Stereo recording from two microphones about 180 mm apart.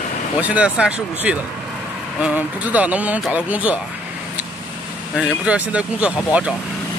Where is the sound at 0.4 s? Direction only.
5° right (ahead or behind).